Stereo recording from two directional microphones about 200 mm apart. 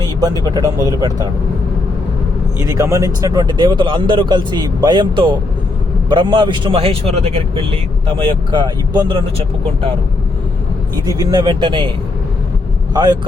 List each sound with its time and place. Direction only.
0.0 s a man's voice: 20° right (ahead or behind)
2.6 s a man's voice: 15° right (ahead or behind)
11.0 s a man's voice: 20° right (ahead or behind)
12.9 s speech: 20° right (ahead or behind)